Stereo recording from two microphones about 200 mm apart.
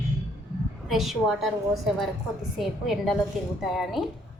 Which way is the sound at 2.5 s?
Centre (ahead or behind).